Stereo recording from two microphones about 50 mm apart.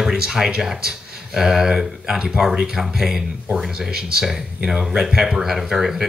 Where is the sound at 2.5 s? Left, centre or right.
Centre.